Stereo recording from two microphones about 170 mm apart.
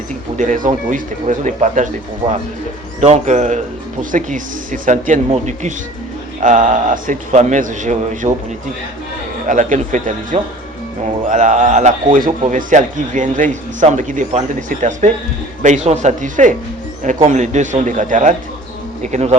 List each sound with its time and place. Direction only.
0.3 s a man's voice: 50° right (ahead or behind)
9.5 s a man's voice: 50° right (ahead or behind)